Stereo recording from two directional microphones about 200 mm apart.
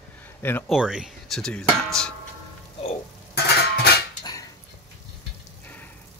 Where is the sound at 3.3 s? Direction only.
55° left (ahead or behind).